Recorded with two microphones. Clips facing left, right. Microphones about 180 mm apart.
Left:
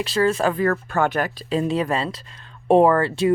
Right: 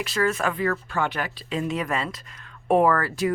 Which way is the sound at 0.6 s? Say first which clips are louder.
Left 5 dB; 50° left (ahead or behind).